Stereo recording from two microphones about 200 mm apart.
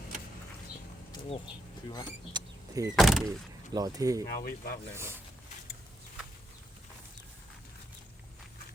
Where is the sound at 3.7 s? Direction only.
20° right (ahead or behind).